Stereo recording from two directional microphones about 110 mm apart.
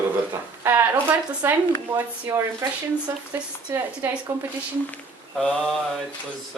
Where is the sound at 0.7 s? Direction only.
20° right (ahead or behind).